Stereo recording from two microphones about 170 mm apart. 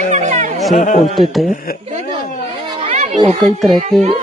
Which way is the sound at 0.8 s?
45° left (ahead or behind).